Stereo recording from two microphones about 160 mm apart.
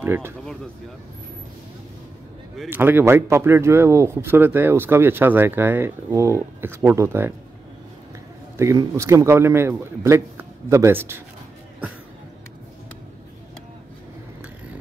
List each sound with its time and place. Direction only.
0.0 s speech: 15° right (ahead or behind)
2.7 s speech: 15° right (ahead or behind)
8.5 s speech: 20° right (ahead or behind)